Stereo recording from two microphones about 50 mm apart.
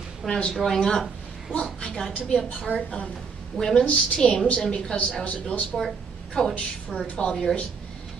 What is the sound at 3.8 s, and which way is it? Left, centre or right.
Speech, left.